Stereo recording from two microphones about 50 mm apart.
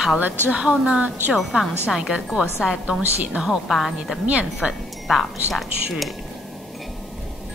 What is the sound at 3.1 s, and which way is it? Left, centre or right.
Speech, right.